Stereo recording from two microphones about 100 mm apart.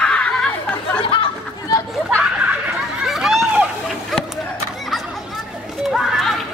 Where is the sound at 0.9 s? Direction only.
65° left (ahead or behind).